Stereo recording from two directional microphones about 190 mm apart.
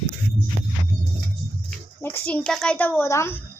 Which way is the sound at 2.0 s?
10° left (ahead or behind).